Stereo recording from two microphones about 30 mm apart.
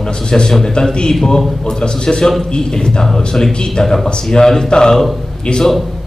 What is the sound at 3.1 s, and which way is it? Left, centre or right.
A man's voice, centre.